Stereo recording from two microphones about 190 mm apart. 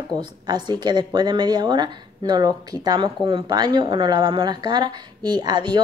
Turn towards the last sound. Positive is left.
turn(degrees=-25)  # may be behind; listen again after turning